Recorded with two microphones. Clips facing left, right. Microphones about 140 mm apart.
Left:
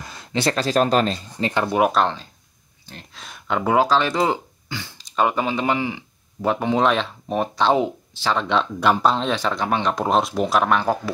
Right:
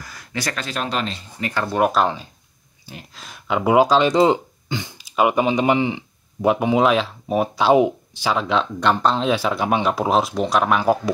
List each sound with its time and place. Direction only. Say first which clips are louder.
0.0 s speech: left 5 dB; 25° left (ahead or behind); by 1.2 s 40° left (ahead or behind)
1.4 s speech: left 2 dB; 20° left (ahead or behind)
1.7 s speech: right 2 dB; centre (ahead or behind)
3.7 s speech: right 4 dB; 15° right (ahead or behind)